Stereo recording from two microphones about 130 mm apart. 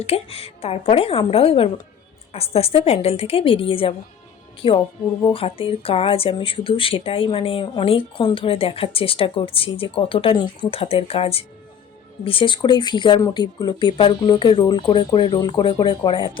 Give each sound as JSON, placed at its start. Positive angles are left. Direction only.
{"t": 0.0, "sound": "speech", "side_deg": 50}